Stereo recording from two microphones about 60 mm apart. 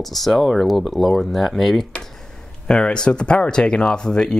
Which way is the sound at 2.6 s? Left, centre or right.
Centre.